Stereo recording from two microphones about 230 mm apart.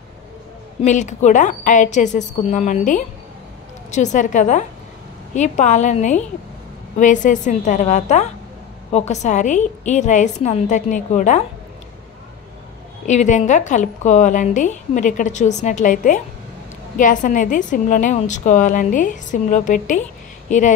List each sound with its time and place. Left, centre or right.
0.8 s a woman's voice: left
13.0 s a woman's voice: left